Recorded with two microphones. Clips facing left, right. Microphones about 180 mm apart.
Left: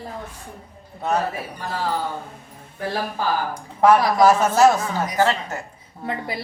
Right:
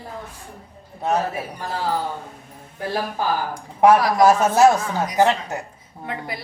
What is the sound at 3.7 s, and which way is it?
A man's voice, 15° right (ahead or behind).